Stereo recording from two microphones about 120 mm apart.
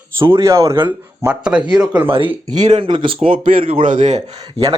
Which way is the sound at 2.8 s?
45° right (ahead or behind).